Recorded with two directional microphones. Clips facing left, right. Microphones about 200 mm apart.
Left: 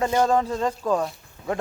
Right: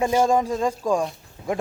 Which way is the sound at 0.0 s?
10° right (ahead or behind).